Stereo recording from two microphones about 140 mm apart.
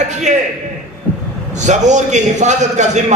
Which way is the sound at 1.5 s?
60° right (ahead or behind).